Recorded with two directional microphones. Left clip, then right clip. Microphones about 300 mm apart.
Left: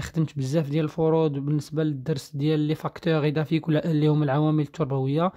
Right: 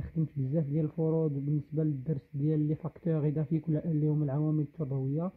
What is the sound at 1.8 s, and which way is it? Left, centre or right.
Speech, centre.